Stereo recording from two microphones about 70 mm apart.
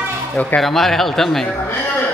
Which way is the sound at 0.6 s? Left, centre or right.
Centre.